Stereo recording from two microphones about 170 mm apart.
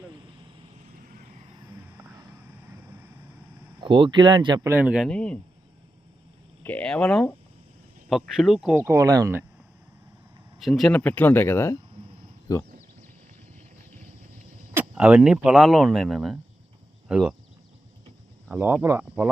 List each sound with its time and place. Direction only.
0.9 s vehicle: 50° right (ahead or behind)
3.8 s speech: 30° right (ahead or behind)
4.7 s speech: 10° right (ahead or behind)
5.0 s speech: 5° left (ahead or behind)
6.6 s speech: 10° left (ahead or behind)
8.7 s speech: 15° right (ahead or behind)
10.6 s speech: centre (ahead or behind); by 12.6 s 20° left (ahead or behind)
14.7 s speech: 10° right (ahead or behind)
18.4 s speech: 10° right (ahead or behind)